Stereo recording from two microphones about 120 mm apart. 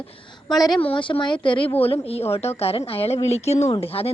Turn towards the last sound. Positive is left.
turn(degrees=55)  # may be behind; listen again after turning